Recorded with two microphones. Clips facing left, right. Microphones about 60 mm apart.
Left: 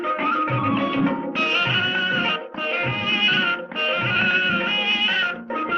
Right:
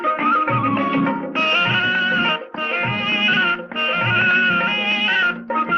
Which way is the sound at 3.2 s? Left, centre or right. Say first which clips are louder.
Right 4 dB; centre.